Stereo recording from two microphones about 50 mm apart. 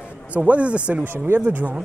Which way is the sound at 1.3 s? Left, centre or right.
Right.